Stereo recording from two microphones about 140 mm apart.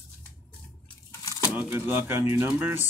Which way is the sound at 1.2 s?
25° left (ahead or behind).